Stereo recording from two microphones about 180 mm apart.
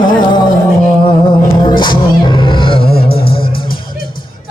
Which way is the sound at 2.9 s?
55° left (ahead or behind).